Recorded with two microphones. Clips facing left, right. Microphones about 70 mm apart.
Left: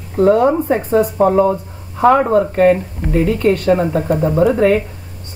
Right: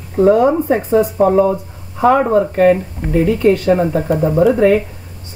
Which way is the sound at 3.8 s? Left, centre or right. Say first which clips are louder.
Right 1 dB; centre.